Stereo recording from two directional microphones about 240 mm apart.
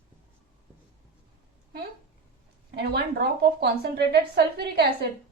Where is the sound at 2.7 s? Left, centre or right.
Right.